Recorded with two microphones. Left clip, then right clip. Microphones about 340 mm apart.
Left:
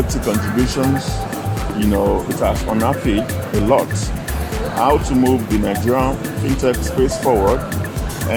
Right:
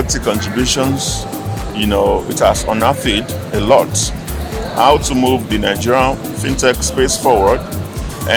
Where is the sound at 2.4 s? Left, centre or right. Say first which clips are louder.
Right 7 dB; right.